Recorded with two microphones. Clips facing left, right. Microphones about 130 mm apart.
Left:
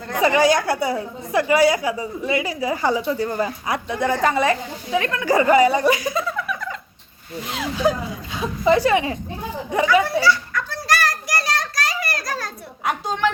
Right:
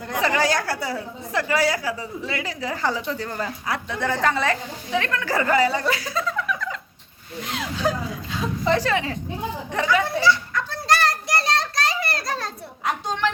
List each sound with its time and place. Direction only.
0.2 s a woman's voice: 15° left (ahead or behind)
7.9 s a woman's voice: 10° left (ahead or behind)
10.2 s children playing: 20° right (ahead or behind)
12.8 s a sound: 5° left (ahead or behind)